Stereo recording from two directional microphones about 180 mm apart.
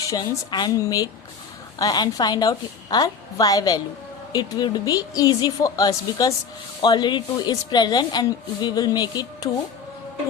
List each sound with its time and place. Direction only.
0.0 s a woman's voice: 20° left (ahead or behind)